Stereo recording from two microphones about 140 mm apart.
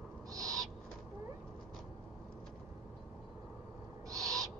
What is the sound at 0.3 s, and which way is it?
Owl, 25° right (ahead or behind).